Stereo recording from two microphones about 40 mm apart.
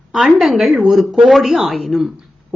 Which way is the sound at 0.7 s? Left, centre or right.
Centre.